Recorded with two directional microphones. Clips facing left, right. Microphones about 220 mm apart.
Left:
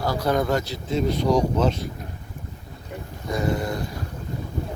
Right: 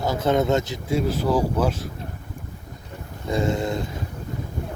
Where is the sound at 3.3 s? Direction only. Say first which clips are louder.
Right 2 dB; 25° right (ahead or behind).